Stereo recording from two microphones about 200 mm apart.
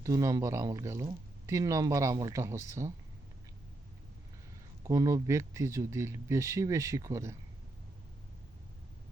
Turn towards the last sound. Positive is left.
turn(degrees=-15)  # may be behind; listen again after turning